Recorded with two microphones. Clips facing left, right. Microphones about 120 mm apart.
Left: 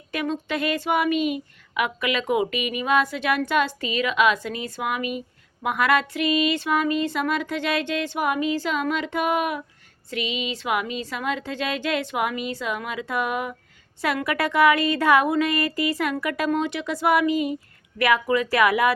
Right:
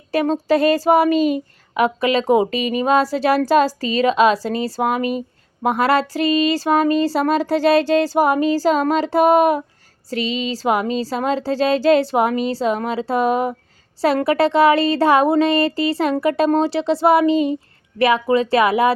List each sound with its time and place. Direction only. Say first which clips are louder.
0.1 s speech: right 10 dB; 35° right (ahead or behind)